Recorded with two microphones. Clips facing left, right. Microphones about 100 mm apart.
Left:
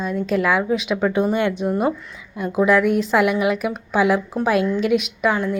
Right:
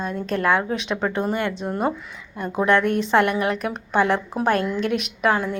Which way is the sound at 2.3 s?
5° left (ahead or behind).